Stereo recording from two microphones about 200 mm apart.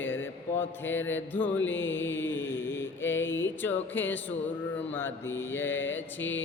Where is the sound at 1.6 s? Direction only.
70° left (ahead or behind).